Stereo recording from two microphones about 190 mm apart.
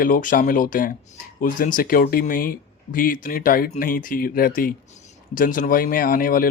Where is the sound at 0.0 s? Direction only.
45° left (ahead or behind).